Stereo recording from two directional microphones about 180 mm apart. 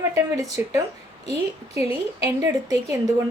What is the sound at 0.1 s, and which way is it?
A woman's voice, 15° right (ahead or behind).